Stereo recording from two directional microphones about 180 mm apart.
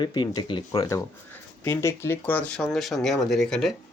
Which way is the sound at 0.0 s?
25° left (ahead or behind).